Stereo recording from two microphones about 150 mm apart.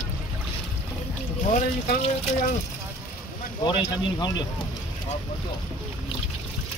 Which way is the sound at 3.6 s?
25° left (ahead or behind).